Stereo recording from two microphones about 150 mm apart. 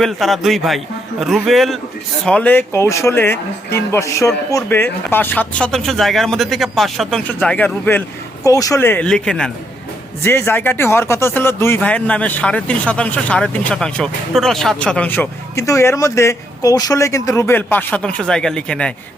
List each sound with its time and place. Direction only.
0.0 s speech: centre (ahead or behind)
7.3 s speech: 10° left (ahead or behind)
8.4 s speech: 20° left (ahead or behind)
9.0 s speech: 5° left (ahead or behind)
10.2 s speech: 15° left (ahead or behind)